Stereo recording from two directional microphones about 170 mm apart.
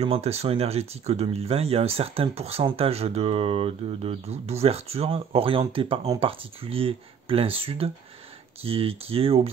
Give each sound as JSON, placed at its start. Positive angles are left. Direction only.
{"t": 0.0, "sound": "speech", "side_deg": -35}